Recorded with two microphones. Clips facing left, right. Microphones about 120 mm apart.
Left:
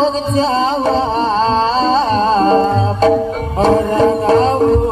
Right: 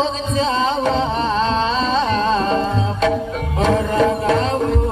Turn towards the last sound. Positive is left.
turn(degrees=35)  # may be behind; listen again after turning